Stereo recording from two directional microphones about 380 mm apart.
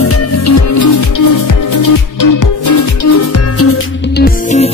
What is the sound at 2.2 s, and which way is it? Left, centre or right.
Music, left.